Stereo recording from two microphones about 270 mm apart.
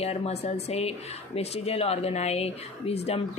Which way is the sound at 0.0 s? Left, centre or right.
Left.